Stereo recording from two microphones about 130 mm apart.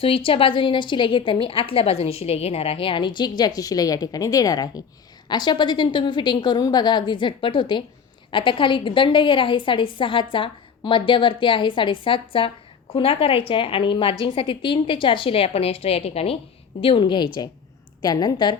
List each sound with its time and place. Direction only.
0.0 s a woman's voice: 45° left (ahead or behind)